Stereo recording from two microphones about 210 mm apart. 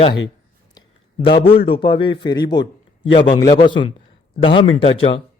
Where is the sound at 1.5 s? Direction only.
25° left (ahead or behind).